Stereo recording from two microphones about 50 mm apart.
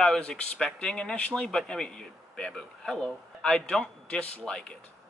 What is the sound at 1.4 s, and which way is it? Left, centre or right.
A man's voice, centre.